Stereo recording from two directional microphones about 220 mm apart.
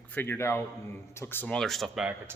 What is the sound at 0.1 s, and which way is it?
A man's voice, 10° left (ahead or behind).